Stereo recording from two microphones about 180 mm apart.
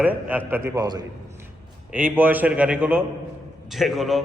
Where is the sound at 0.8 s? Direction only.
20° right (ahead or behind).